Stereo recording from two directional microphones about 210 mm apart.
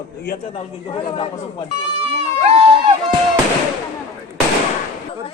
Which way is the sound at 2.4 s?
25° right (ahead or behind).